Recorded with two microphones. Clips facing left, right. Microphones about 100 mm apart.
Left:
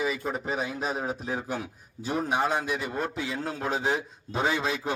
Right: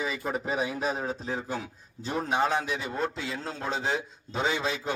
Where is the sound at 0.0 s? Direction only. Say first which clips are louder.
Left 1 dB; centre (ahead or behind).